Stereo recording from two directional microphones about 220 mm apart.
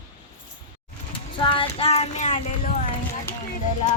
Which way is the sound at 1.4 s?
25° left (ahead or behind).